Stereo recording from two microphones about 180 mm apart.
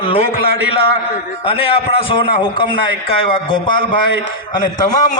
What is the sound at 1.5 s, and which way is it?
A man's voice, 30° left (ahead or behind).